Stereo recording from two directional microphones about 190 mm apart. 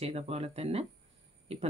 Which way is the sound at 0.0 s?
30° right (ahead or behind).